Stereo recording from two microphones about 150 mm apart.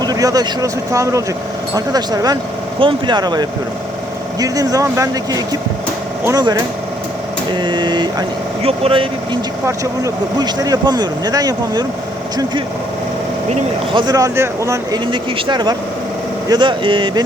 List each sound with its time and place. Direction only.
0.0 s speech: 25° right (ahead or behind)
9.6 s speech: 25° right (ahead or behind)
13.9 s speech: 30° right (ahead or behind)
15.0 s speech: 30° right (ahead or behind)